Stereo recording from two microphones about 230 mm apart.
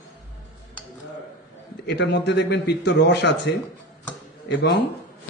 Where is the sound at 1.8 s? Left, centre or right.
Left.